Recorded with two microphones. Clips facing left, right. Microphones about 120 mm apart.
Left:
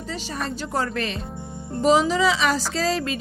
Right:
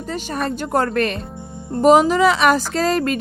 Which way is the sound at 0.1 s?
55° right (ahead or behind).